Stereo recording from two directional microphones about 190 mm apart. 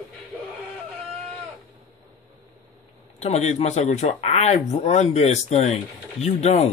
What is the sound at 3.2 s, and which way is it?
Speech, 35° left (ahead or behind).